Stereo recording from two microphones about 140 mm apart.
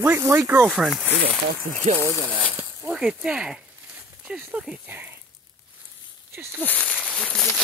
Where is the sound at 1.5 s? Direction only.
75° right (ahead or behind).